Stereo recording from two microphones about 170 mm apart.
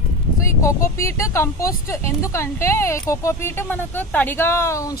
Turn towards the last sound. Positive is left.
turn(degrees=20)  # may be behind; listen again after turning